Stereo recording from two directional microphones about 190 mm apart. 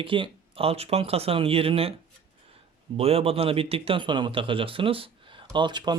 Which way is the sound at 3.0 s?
30° right (ahead or behind).